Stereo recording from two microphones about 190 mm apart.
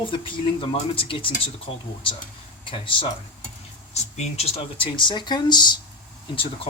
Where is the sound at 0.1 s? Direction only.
25° left (ahead or behind).